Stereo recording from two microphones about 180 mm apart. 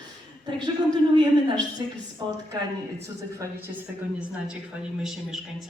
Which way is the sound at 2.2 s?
20° right (ahead or behind).